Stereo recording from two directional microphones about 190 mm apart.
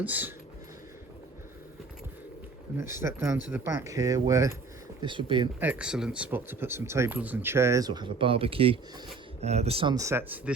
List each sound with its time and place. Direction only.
0.0 s speech: 10° right (ahead or behind)
2.7 s speech: 15° right (ahead or behind)
5.5 s speech: 5° right (ahead or behind)